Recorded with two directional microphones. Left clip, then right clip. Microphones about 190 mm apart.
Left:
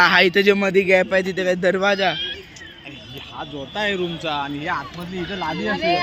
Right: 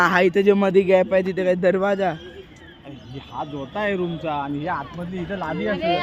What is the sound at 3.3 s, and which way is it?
Speech, 55° right (ahead or behind).